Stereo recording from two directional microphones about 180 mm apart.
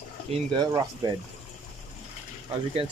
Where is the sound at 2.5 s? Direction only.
30° right (ahead or behind).